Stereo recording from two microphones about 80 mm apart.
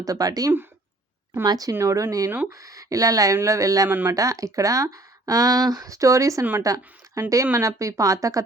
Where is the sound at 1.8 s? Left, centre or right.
Right.